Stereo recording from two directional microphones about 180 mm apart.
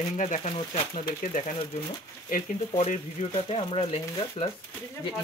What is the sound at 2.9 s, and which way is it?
Speech, 35° left (ahead or behind).